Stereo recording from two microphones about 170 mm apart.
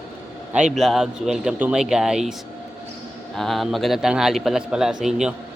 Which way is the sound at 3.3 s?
Centre (ahead or behind).